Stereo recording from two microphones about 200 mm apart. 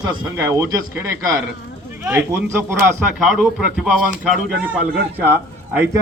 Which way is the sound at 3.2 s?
Centre (ahead or behind).